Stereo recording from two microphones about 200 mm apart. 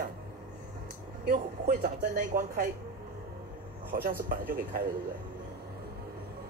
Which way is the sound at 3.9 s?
45° right (ahead or behind).